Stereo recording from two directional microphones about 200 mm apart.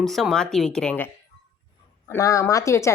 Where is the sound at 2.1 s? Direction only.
15° left (ahead or behind).